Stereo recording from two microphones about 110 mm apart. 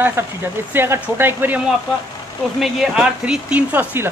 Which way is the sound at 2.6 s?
5° right (ahead or behind).